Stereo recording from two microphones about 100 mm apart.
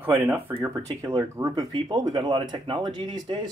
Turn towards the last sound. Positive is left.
turn(degrees=-45)  # may be behind; listen again after turning